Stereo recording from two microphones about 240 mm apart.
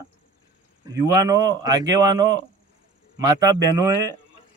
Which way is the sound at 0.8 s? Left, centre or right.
Centre.